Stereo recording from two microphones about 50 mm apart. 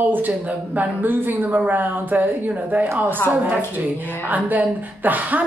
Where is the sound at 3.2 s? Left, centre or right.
Left.